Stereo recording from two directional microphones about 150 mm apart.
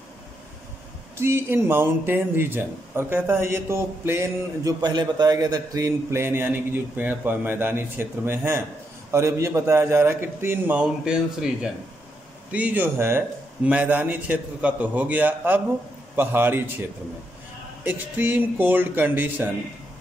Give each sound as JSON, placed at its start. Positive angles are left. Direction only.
{"t": 1.1, "sound": "speech", "side_deg": -15}
{"t": 17.8, "sound": "speech", "side_deg": -10}